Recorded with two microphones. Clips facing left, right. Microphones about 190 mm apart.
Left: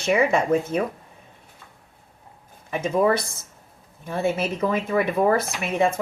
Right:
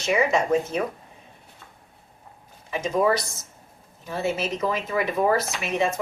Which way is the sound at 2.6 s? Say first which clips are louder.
Left 2 dB; 55° left (ahead or behind).